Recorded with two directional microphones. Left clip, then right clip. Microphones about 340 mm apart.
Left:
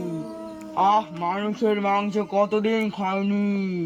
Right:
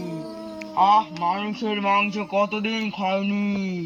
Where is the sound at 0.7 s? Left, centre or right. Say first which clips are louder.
Right 2 dB; centre.